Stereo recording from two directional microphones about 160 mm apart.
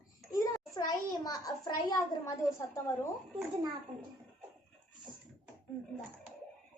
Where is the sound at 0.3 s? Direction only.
20° left (ahead or behind).